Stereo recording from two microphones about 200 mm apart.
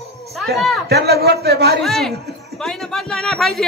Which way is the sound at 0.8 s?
55° right (ahead or behind).